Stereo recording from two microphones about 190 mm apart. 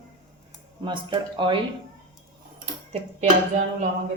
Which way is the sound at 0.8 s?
25° right (ahead or behind).